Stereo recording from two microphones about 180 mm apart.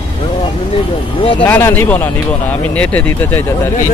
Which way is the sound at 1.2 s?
30° left (ahead or behind).